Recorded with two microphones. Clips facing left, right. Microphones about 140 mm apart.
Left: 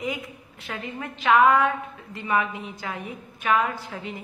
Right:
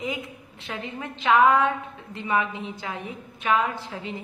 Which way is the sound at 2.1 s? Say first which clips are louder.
Even; 20° right (ahead or behind).